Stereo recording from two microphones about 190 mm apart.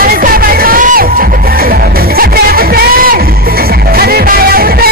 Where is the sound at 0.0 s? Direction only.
50° right (ahead or behind).